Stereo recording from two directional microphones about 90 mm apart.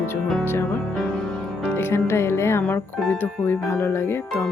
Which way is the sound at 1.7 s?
25° left (ahead or behind).